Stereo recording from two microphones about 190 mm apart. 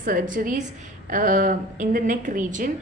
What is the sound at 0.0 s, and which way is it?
A woman's voice, 45° right (ahead or behind).